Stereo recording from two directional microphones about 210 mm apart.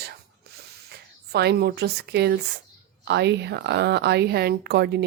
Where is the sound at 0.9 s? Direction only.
50° right (ahead or behind).